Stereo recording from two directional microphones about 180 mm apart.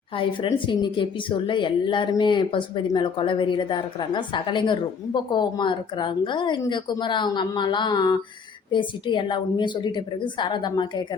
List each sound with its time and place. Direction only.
0.2 s a woman's voice: 30° left (ahead or behind)